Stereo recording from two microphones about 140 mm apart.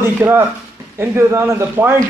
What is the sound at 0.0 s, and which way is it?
A man's voice, 15° right (ahead or behind).